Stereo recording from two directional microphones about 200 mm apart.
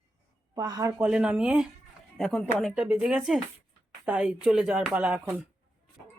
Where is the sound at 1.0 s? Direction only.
5° right (ahead or behind).